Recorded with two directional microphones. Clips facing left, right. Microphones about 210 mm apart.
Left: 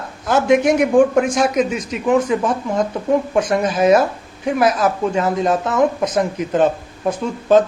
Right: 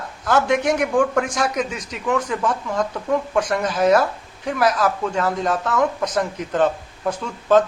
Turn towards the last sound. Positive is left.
turn(degrees=20)  # may be behind; listen again after turning